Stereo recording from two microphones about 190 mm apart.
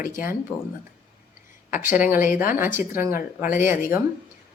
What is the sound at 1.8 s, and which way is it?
Speech, 10° right (ahead or behind).